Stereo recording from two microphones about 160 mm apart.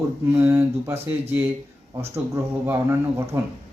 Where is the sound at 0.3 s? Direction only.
10° right (ahead or behind).